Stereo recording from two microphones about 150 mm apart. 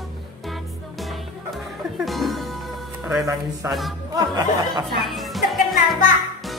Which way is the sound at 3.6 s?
20° right (ahead or behind).